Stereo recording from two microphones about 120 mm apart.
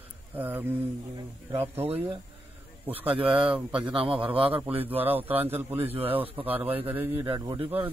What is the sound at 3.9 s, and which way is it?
Speech, 50° right (ahead or behind).